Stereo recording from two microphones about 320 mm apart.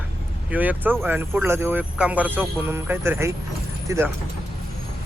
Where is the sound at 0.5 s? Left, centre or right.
Centre.